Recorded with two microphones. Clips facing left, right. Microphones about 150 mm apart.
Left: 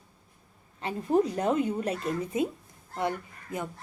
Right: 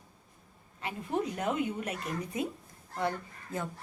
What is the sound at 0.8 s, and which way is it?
A woman's voice, 35° left (ahead or behind).